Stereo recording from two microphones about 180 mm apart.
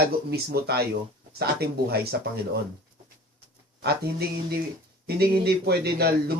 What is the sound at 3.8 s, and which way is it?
A man's voice, 65° right (ahead or behind).